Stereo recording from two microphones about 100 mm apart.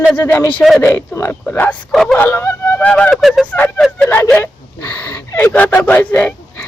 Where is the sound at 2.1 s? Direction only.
20° left (ahead or behind); by 4.1 s centre (ahead or behind).